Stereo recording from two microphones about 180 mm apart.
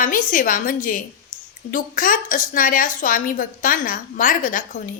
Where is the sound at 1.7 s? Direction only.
50° left (ahead or behind).